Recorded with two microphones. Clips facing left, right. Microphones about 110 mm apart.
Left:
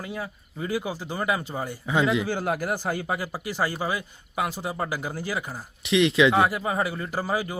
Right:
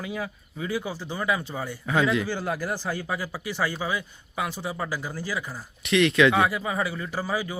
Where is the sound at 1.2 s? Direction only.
45° left (ahead or behind).